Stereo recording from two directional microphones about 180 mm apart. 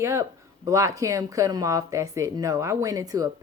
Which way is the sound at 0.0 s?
15° right (ahead or behind).